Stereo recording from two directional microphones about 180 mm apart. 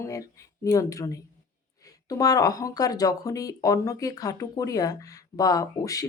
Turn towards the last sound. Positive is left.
turn(degrees=20)  # may be behind; listen again after turning